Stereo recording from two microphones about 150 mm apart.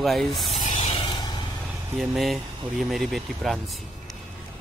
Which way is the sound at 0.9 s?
40° left (ahead or behind).